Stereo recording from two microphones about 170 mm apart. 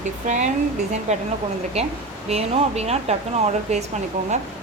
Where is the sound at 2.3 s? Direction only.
40° right (ahead or behind).